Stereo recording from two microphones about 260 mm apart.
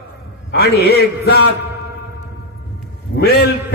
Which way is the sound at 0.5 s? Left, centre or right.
Left.